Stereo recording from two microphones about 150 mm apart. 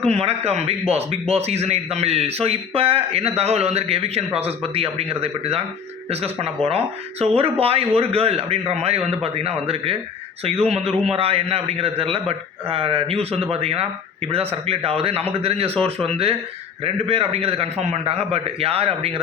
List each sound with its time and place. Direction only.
0.0 s a man's voice: 45° right (ahead or behind)